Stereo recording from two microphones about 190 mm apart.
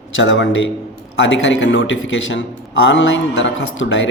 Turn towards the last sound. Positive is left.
turn(degrees=75)  # may be behind; listen again after turning